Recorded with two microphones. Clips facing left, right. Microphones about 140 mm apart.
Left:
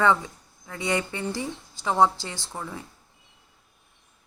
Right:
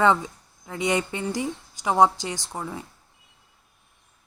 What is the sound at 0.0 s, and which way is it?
Speech, 20° right (ahead or behind).